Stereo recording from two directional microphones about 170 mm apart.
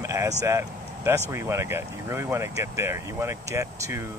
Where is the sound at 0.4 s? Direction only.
15° right (ahead or behind).